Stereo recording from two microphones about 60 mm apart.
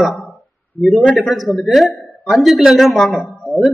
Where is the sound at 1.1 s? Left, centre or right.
Centre.